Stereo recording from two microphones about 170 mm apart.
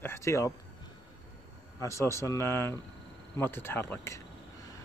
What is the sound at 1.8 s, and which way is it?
A man's voice, 15° left (ahead or behind).